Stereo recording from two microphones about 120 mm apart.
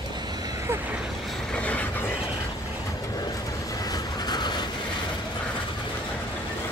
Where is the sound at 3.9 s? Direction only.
35° left (ahead or behind).